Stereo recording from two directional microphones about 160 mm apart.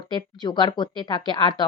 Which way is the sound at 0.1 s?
30° left (ahead or behind).